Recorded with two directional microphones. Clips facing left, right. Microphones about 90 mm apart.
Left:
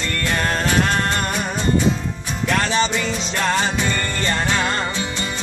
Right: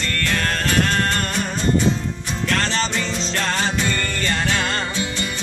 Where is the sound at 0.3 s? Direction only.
20° left (ahead or behind).